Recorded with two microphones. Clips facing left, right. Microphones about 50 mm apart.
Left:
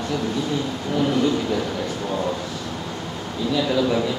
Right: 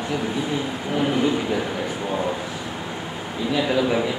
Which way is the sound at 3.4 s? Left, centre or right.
Right.